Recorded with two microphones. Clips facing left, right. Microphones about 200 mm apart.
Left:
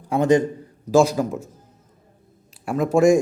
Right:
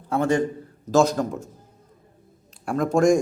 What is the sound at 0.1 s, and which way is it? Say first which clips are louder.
A man's voice: left 4 dB; 15° left (ahead or behind).